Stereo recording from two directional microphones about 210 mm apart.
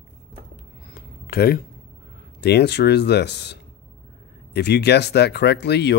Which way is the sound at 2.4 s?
50° left (ahead or behind).